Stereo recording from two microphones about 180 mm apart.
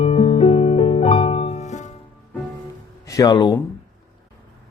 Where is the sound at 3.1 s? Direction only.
20° left (ahead or behind).